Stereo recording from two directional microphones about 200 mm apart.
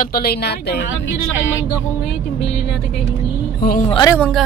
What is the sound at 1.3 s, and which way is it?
Speech, 70° left (ahead or behind).